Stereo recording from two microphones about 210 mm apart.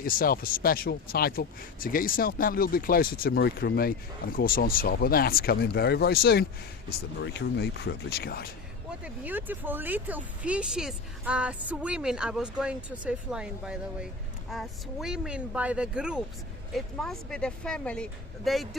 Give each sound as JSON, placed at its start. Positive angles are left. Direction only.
{"t": 0.0, "sound": "speech", "side_deg": 45}
{"t": 9.0, "sound": "speech", "side_deg": -10}